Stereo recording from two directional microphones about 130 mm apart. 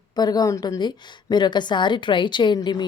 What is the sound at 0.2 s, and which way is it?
A woman's voice, 30° left (ahead or behind).